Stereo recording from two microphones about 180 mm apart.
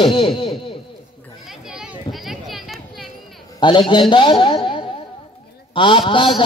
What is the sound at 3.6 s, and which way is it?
A man's voice, 25° left (ahead or behind).